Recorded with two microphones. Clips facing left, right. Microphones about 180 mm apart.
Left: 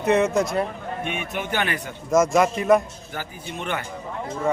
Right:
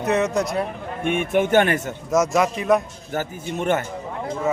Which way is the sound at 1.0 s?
50° right (ahead or behind).